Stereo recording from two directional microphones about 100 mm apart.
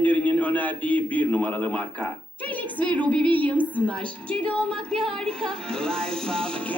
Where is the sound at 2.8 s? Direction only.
15° left (ahead or behind).